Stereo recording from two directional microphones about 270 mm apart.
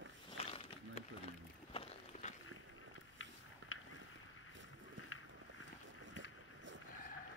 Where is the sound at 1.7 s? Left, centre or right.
Left.